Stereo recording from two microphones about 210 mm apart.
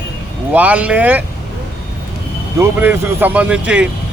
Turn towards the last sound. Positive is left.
turn(degrees=-5)  # may be behind; listen again after turning